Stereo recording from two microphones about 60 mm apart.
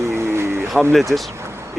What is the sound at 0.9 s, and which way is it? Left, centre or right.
Speech, centre.